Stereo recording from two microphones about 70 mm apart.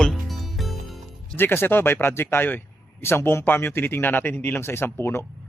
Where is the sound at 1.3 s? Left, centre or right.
Left.